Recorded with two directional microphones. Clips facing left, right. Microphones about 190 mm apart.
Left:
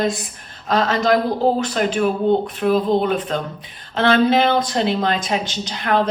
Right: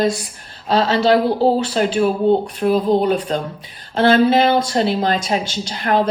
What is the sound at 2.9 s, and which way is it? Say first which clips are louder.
Speech: right 2 dB; 40° right (ahead or behind).